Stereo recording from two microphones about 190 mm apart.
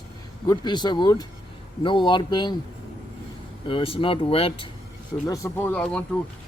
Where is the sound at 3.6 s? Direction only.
30° left (ahead or behind).